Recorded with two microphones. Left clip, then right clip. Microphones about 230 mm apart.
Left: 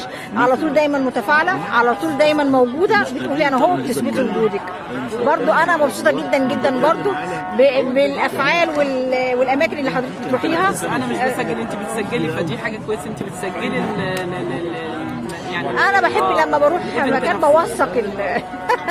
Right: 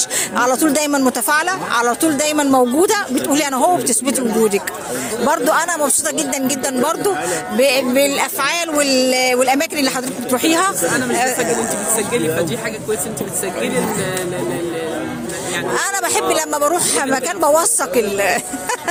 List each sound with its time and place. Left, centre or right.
0.3 s speech: right
5.3 s speech: right
11.9 s speech: centre
15.7 s speech: right